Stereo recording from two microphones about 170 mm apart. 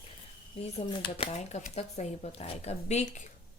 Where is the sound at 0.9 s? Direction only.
30° left (ahead or behind).